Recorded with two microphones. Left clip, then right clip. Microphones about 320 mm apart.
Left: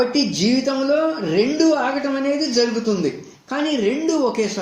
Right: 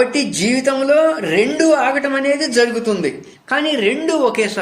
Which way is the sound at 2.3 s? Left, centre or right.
Right.